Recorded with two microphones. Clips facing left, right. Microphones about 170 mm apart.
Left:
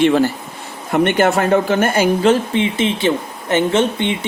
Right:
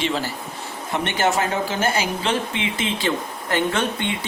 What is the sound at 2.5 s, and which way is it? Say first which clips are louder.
Speech: left 8 dB; 30° left (ahead or behind).